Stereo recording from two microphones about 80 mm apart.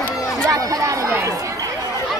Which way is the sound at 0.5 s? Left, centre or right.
Right.